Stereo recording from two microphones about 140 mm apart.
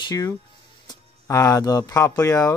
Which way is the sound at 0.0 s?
30° left (ahead or behind).